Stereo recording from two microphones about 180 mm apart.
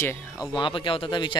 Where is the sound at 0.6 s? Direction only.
30° left (ahead or behind).